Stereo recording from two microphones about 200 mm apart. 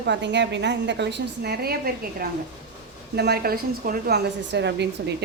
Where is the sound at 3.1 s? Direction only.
55° right (ahead or behind).